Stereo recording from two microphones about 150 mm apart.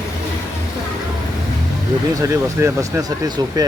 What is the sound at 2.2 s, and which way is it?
Speech, 20° right (ahead or behind).